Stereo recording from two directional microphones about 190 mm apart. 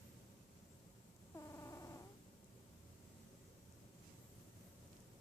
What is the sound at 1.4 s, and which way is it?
Cat, 15° left (ahead or behind).